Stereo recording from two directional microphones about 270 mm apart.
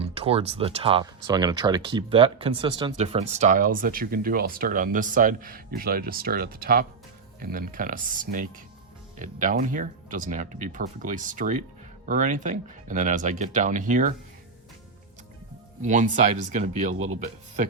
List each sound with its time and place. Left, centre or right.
0.0 s speech: right
15.8 s speech: right